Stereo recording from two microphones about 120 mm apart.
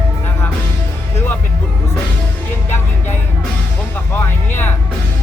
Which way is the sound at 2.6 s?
20° left (ahead or behind).